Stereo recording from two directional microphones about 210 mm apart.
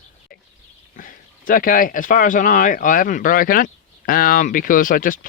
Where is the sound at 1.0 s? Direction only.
40° left (ahead or behind).